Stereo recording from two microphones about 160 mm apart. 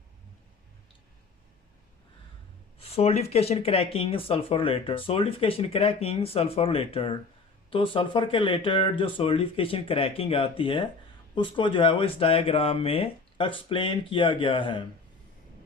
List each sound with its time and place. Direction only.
2.7 s speech: 40° left (ahead or behind)